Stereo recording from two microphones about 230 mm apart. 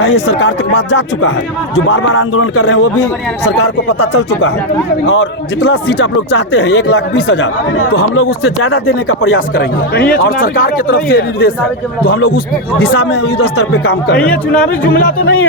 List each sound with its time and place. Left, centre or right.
0.3 s speech: left
4.0 s speech: left
5.6 s speech: left
6.6 s speech: left
7.9 s speech: left
10.2 s speech: left
13.4 s speech: left
14.2 s speech: centre